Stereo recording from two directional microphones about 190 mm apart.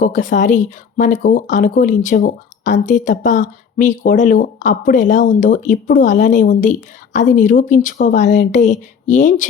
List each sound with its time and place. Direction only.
0.0 s speech: 45° left (ahead or behind)